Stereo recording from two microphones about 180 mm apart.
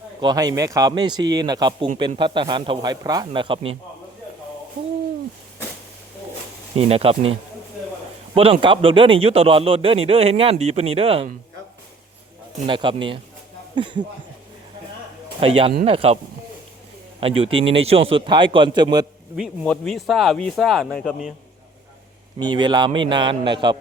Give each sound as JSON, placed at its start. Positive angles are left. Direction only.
{"t": 0.2, "sound": "a man's voice", "side_deg": -20}
{"t": 6.7, "sound": "speech", "side_deg": -35}
{"t": 8.6, "sound": "speech", "side_deg": -30}
{"t": 12.6, "sound": "a man's voice", "side_deg": -25}
{"t": 15.4, "sound": "speech", "side_deg": -30}
{"t": 17.2, "sound": "a man's voice", "side_deg": -30}
{"t": 19.4, "sound": "speech", "side_deg": 5}
{"t": 22.4, "sound": "a man's voice", "side_deg": -25}